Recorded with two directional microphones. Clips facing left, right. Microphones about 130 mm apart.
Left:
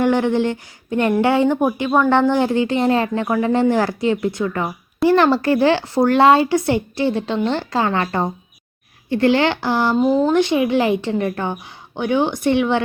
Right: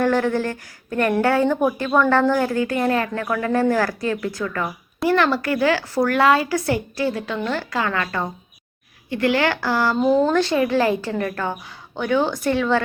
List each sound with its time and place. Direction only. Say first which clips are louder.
0.0 s speech: left 3 dB; 20° left (ahead or behind)
10.0 s speech: even; 5° left (ahead or behind)
10.3 s speech: left 2 dB; 15° left (ahead or behind)